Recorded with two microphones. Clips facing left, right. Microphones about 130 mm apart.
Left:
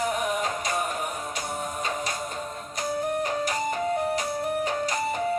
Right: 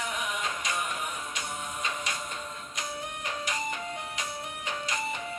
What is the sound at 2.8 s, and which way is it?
Music, 40° left (ahead or behind).